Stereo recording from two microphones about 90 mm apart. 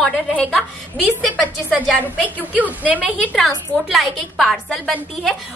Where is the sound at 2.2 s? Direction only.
15° right (ahead or behind).